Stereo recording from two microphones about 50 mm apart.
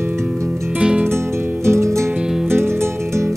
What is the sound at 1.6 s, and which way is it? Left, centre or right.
Music, right.